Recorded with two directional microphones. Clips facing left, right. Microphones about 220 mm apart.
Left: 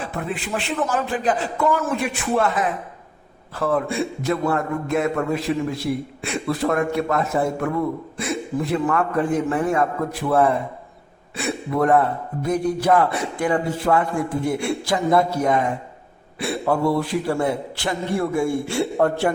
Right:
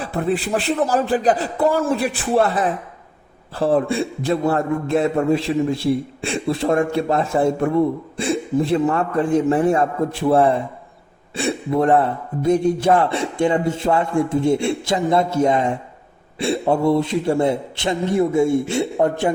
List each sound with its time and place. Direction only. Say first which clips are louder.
0.0 s a man's voice: right 6 dB; 35° right (ahead or behind); by 19.3 s 20° right (ahead or behind)